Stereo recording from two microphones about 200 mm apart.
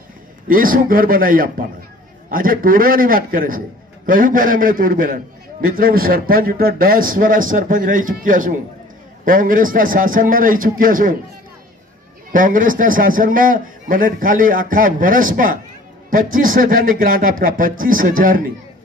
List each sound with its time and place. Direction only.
0.4 s a man's voice: 45° right (ahead or behind)
12.3 s a man's voice: 40° right (ahead or behind)